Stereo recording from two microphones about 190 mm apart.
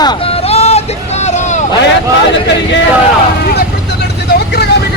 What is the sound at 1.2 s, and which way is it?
Vehicle, 35° left (ahead or behind).